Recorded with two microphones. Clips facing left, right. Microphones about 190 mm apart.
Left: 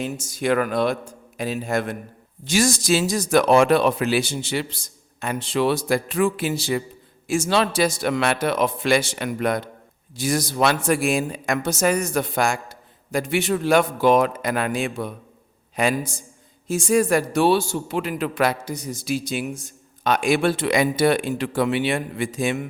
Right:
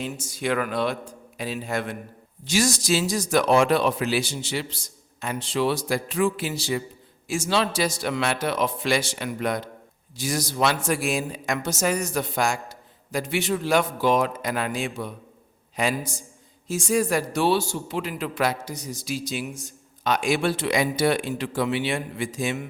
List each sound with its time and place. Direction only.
0.0 s a man's voice: 45° left (ahead or behind)